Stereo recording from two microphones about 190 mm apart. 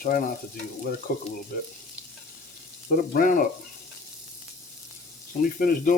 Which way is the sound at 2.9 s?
45° left (ahead or behind).